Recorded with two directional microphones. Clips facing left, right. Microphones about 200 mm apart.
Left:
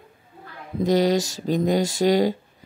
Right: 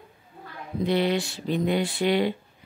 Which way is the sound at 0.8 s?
40° left (ahead or behind).